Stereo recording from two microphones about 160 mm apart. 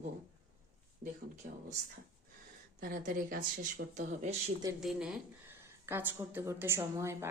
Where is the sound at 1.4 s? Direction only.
55° right (ahead or behind).